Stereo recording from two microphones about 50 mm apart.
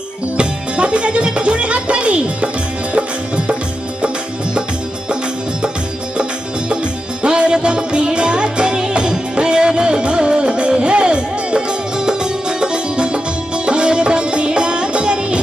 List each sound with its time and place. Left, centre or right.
0.4 s music: right
7.2 s music: centre